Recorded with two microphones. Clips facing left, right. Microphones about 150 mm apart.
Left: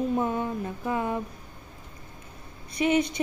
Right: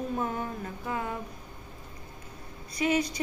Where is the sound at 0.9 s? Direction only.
20° left (ahead or behind).